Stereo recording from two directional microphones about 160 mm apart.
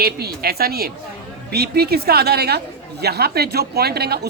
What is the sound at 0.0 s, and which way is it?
A woman's voice, 75° right (ahead or behind).